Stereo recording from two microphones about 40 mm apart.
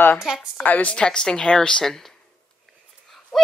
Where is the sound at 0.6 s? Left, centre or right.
Left.